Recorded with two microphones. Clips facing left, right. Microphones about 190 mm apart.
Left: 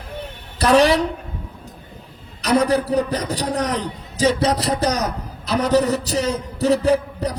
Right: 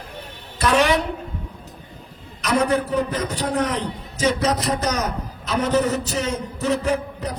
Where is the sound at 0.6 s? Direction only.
35° left (ahead or behind).